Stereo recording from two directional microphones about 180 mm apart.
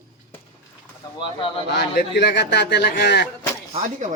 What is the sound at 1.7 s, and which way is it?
A man's voice, 70° left (ahead or behind).